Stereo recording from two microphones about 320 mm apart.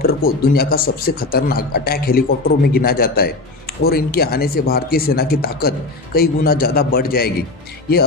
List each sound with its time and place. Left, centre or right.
0.0 s speech: left